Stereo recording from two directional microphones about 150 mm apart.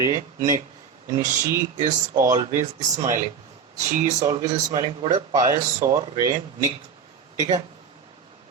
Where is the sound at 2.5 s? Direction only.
55° right (ahead or behind).